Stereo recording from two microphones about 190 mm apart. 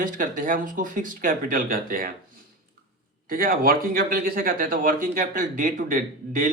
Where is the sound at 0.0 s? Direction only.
45° right (ahead or behind).